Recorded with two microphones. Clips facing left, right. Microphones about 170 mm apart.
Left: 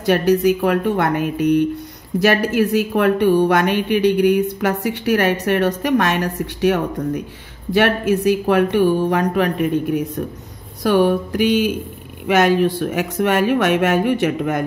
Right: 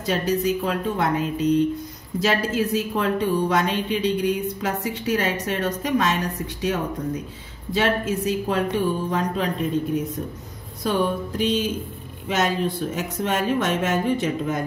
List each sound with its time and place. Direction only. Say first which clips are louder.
0.0 s a woman's voice: left 7 dB; 70° left (ahead or behind)